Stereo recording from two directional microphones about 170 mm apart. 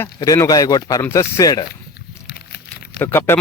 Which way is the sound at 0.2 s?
20° left (ahead or behind).